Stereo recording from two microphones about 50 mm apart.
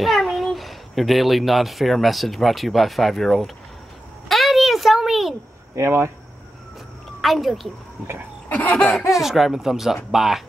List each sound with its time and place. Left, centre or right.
0.0 s a child's voice: centre
4.3 s a sound: centre
5.8 s speech: right
7.2 s speech: centre
8.5 s a sound: left
8.7 s speech: centre
9.1 s speech: centre